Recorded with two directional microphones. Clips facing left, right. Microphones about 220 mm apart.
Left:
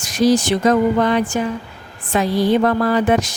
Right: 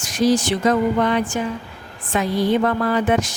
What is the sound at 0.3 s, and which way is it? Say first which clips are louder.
A woman's voice: left 3 dB; 45° left (ahead or behind).